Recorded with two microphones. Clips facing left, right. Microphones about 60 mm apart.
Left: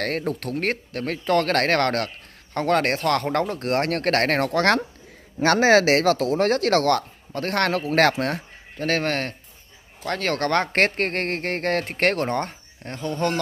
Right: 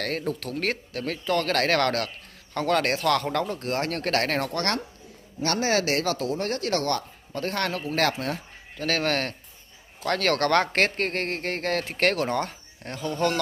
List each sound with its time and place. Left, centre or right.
0.0 s speech: left
3.4 s speech: left
4.5 s speech: left
8.7 s speech: left
10.7 s speech: left